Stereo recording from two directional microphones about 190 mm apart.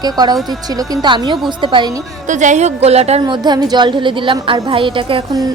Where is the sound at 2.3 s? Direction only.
40° right (ahead or behind).